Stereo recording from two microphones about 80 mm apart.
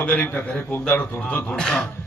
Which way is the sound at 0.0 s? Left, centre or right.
Left.